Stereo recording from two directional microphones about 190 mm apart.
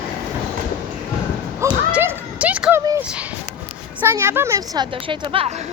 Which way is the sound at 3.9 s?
10° right (ahead or behind).